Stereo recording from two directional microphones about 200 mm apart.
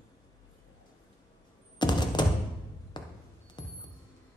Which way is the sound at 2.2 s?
20° left (ahead or behind).